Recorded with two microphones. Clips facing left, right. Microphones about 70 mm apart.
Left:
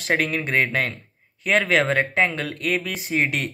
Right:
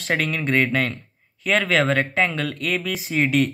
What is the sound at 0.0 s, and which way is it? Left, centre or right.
Speech, centre.